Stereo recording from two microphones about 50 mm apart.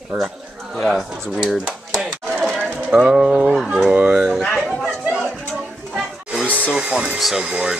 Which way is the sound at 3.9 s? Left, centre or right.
Right.